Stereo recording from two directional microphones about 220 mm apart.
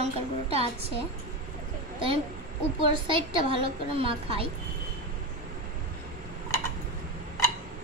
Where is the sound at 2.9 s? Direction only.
25° right (ahead or behind).